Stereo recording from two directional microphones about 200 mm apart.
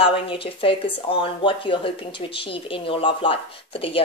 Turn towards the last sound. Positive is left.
turn(degrees=25)  # may be behind; listen again after turning